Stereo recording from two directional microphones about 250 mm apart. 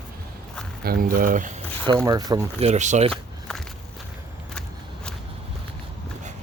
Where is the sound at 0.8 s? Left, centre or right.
Right.